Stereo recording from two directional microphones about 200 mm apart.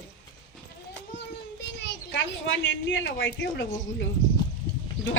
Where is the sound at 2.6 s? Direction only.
70° left (ahead or behind).